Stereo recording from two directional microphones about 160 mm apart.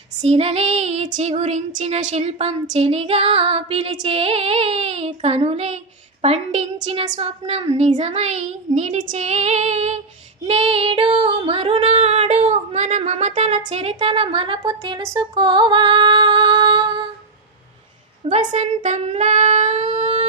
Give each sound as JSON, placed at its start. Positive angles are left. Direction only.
{"t": 0.2, "sound": "female singing", "side_deg": -40}
{"t": 18.3, "sound": "female singing", "side_deg": -45}